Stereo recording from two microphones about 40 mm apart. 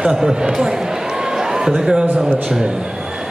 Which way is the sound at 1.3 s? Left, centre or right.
Centre.